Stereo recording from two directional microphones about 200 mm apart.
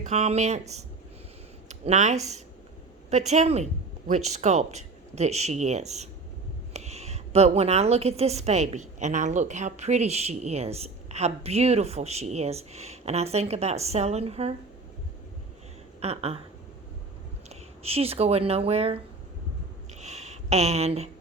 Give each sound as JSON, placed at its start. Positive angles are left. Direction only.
{"t": 0.0, "sound": "a woman's voice", "side_deg": -35}
{"t": 1.6, "sound": "a woman's voice", "side_deg": -35}
{"t": 16.0, "sound": "speech", "side_deg": -30}
{"t": 17.5, "sound": "speech", "side_deg": -30}
{"t": 20.0, "sound": "a sound", "side_deg": -35}